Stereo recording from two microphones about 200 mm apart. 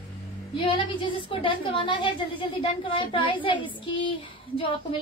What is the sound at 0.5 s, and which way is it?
A woman's voice, 25° left (ahead or behind).